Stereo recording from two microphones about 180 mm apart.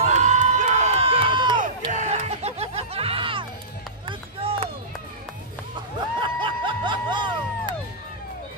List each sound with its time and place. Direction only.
0.0 s crowd: 40° right (ahead or behind)
1.6 s music: 45° right (ahead or behind)
4.1 s run: 30° right (ahead or behind)
5.9 s music: 25° right (ahead or behind)